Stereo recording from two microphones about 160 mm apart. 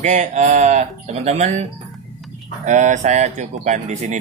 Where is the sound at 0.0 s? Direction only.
50° right (ahead or behind).